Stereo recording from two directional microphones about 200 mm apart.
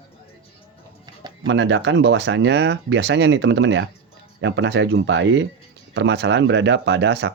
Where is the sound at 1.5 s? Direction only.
65° right (ahead or behind).